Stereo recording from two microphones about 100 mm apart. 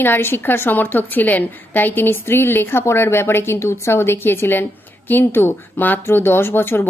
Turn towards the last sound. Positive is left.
turn(degrees=20)  # may be behind; listen again after turning